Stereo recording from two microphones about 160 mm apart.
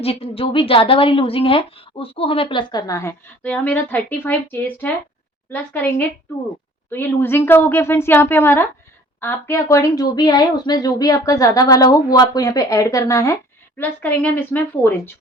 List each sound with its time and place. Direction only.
0.0 s a woman's voice: 35° left (ahead or behind); by 15.1 s 10° left (ahead or behind)